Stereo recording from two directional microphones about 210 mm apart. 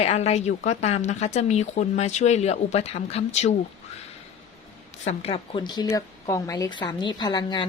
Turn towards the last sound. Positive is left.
turn(degrees=20)  # may be behind; listen again after turning